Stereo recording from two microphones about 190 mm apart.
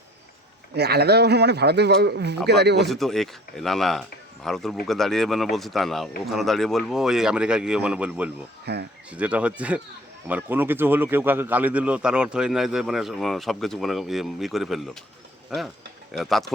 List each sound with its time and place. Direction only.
0.7 s a man's voice: 60° right (ahead or behind)
2.9 s a man's voice: centre (ahead or behind)
8.6 s speech: 60° right (ahead or behind)
9.0 s a man's voice: 5° right (ahead or behind)